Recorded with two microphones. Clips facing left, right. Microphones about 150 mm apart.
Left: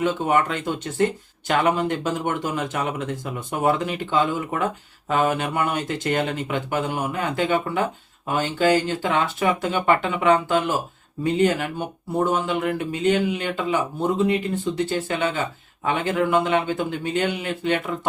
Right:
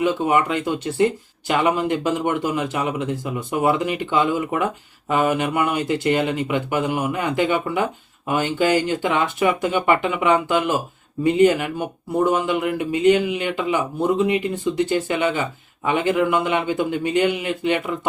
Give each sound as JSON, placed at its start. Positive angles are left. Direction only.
{"t": 0.0, "sound": "speech", "side_deg": -10}